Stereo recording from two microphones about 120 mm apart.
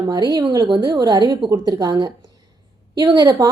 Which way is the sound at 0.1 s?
35° right (ahead or behind).